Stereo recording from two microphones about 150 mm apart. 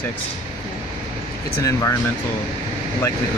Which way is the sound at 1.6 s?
20° left (ahead or behind).